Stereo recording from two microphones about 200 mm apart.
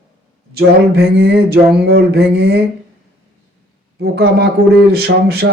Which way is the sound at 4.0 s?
55° right (ahead or behind).